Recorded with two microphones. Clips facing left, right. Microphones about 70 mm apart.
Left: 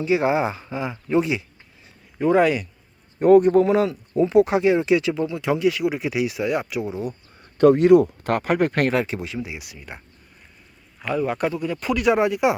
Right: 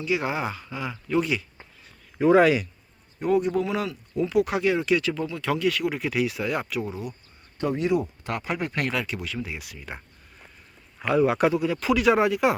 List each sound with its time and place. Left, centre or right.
0.0 s speech: left
2.1 s speech: centre
3.2 s speech: left; by 7.0 s centre
7.6 s speech: left
9.0 s speech: left; by 10.0 s centre
11.0 s speech: centre